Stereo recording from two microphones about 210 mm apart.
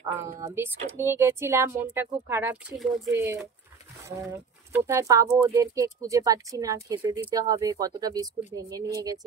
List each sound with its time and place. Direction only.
0.6 s speech: 10° right (ahead or behind)